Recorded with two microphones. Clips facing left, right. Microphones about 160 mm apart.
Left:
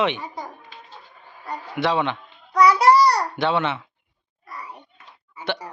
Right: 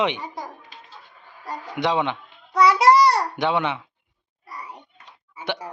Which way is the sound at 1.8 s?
15° right (ahead or behind).